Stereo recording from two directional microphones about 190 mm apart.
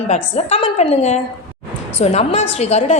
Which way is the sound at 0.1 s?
35° left (ahead or behind).